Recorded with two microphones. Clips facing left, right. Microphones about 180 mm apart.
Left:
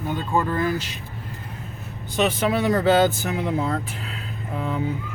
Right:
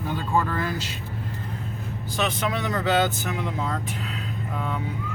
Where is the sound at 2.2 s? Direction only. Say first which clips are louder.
Left 6 dB; 30° left (ahead or behind).